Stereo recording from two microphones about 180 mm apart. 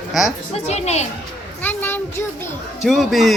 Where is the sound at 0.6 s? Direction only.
35° left (ahead or behind).